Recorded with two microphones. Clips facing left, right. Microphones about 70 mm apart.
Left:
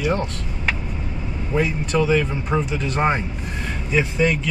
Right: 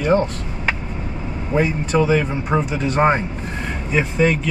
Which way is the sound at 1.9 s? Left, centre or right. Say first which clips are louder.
Right 2 dB; centre.